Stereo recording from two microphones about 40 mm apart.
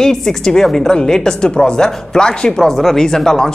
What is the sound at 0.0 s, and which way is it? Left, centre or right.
A man's voice, centre.